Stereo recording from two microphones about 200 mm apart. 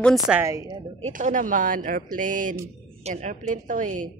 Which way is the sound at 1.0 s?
40° right (ahead or behind).